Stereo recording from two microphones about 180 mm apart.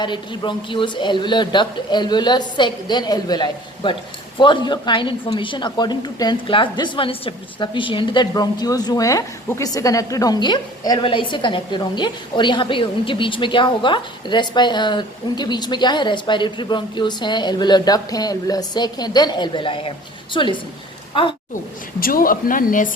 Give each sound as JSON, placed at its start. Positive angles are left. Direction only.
{"t": 0.0, "sound": "a woman's voice", "side_deg": 25}
{"t": 22.0, "sound": "speech", "side_deg": 50}